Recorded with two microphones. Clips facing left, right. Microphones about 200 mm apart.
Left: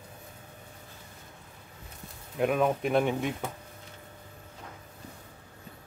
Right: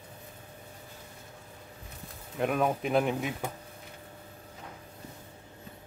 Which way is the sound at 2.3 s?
Centre (ahead or behind).